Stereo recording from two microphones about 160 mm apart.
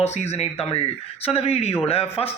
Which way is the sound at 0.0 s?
45° left (ahead or behind).